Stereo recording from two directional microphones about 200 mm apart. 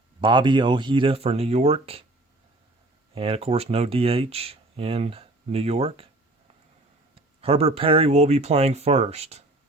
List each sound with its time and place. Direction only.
0.2 s speech: 25° right (ahead or behind)
3.2 s speech: 30° right (ahead or behind)
7.2 s speech: 30° right (ahead or behind)